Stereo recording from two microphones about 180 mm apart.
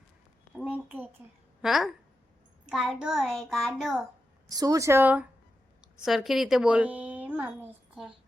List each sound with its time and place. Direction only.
0.5 s a sound: 5° right (ahead or behind)
1.6 s a child's voice: centre (ahead or behind)
4.4 s speech: 20° right (ahead or behind)